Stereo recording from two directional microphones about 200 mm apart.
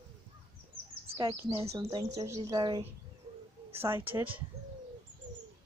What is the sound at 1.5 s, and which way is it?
Speech, 15° right (ahead or behind).